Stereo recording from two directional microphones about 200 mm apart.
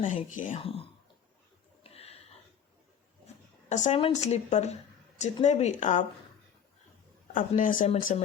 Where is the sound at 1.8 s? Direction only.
30° left (ahead or behind).